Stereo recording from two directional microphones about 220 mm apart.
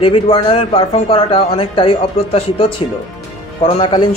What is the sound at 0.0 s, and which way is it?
A man's voice, 25° left (ahead or behind).